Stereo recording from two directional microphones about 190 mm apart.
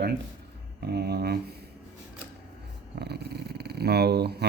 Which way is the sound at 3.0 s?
60° right (ahead or behind).